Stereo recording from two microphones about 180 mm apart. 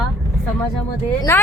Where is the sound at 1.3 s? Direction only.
15° left (ahead or behind).